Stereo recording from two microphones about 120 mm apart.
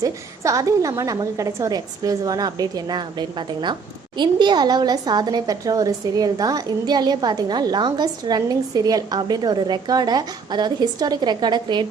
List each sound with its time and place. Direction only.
0.0 s a woman's voice: 30° right (ahead or behind)